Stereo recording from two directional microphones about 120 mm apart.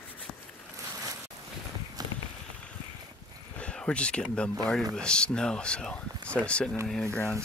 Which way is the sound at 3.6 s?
10° left (ahead or behind).